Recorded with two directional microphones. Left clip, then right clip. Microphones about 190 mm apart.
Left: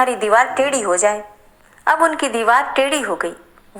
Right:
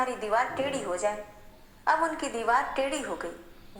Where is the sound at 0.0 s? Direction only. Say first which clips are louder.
Left 13 dB; 40° left (ahead or behind).